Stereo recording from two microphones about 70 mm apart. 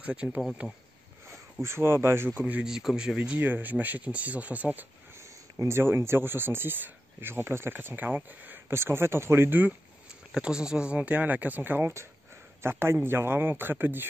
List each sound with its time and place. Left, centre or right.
0.0 s speech: centre
1.3 s speech: right
2.3 s speech: right
2.6 s speech: centre
3.2 s speech: right
5.1 s speech: right
10.3 s speech: centre; by 14.0 s right